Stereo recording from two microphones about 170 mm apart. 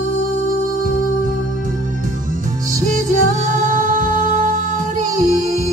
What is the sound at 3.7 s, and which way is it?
Music, 50° right (ahead or behind).